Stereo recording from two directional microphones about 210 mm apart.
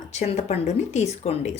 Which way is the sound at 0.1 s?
30° left (ahead or behind).